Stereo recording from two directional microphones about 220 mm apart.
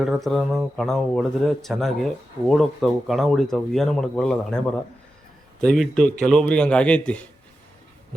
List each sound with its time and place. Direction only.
0.0 s speech: centre (ahead or behind)